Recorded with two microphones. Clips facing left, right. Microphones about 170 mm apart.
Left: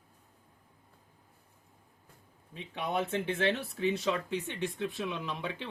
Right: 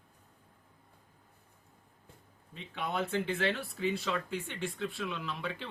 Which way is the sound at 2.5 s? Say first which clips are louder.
Left 2 dB; 20° left (ahead or behind).